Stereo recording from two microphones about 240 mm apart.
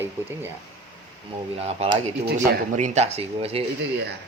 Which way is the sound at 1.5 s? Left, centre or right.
Right.